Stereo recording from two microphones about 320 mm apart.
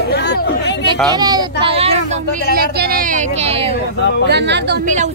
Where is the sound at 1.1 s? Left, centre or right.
Centre.